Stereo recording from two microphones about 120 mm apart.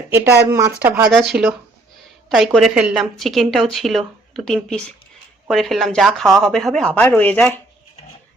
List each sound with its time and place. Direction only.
0.1 s speech: 20° right (ahead or behind)
1.1 s speech: 5° right (ahead or behind)